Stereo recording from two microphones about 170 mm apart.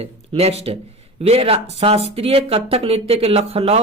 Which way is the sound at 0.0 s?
35° right (ahead or behind).